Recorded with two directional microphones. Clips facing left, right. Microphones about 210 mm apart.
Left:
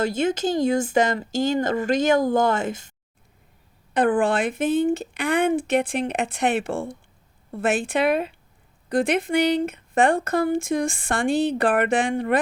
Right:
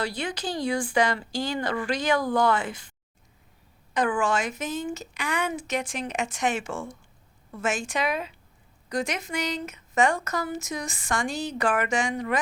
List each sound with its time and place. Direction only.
0.0 s speech: 45° left (ahead or behind)
3.9 s speech: 55° left (ahead or behind)